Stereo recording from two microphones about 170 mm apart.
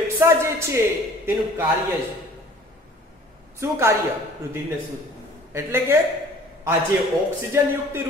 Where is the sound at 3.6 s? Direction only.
15° right (ahead or behind).